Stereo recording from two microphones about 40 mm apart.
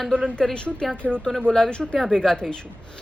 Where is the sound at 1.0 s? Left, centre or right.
Left; by 2.3 s centre.